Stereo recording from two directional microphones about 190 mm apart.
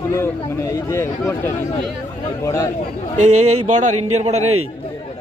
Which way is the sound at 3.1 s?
40° right (ahead or behind).